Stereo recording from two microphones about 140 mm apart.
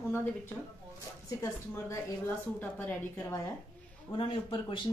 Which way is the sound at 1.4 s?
20° left (ahead or behind).